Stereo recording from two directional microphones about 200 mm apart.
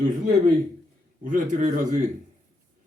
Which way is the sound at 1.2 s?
40° right (ahead or behind).